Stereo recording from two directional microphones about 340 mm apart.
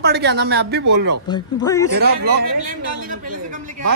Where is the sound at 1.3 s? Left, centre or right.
Centre.